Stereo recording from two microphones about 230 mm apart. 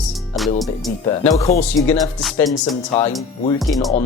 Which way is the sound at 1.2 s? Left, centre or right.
Centre.